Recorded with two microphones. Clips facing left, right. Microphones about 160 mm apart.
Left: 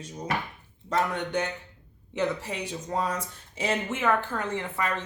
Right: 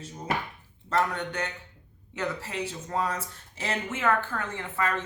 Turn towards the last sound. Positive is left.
turn(degrees=15)  # may be behind; listen again after turning